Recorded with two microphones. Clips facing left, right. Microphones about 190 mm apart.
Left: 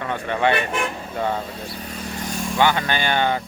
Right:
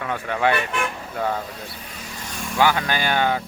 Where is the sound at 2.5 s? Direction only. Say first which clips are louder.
Even; 5° right (ahead or behind).